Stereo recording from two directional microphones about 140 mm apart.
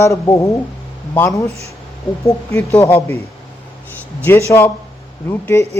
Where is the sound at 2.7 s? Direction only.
15° left (ahead or behind).